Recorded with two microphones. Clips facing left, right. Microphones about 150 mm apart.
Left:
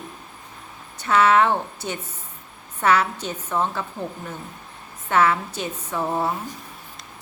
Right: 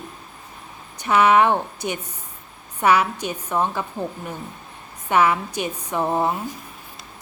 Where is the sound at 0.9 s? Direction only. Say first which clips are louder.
Right 1 dB; 15° right (ahead or behind).